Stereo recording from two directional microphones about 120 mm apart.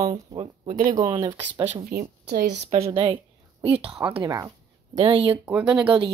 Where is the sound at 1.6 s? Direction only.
65° right (ahead or behind).